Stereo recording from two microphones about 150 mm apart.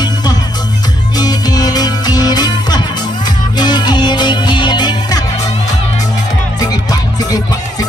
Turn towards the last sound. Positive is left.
turn(degrees=25)  # may be behind; listen again after turning